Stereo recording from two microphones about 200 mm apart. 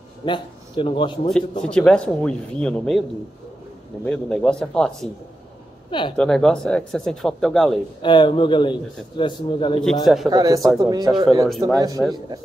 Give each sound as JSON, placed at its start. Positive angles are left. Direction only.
{"t": 0.2, "sound": "a man's voice", "side_deg": 25}
{"t": 1.6, "sound": "speech", "side_deg": 5}
{"t": 5.9, "sound": "speech", "side_deg": 25}
{"t": 6.1, "sound": "speech", "side_deg": 5}
{"t": 8.0, "sound": "a man's voice", "side_deg": 25}
{"t": 10.0, "sound": "speech", "side_deg": 0}
{"t": 10.3, "sound": "speech", "side_deg": -20}